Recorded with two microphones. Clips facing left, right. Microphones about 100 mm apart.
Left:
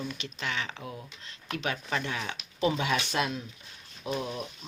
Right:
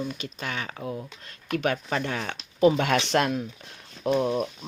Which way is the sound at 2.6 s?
55° right (ahead or behind).